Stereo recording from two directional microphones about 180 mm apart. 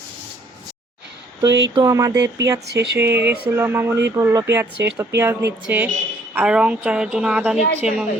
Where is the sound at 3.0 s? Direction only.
15° right (ahead or behind).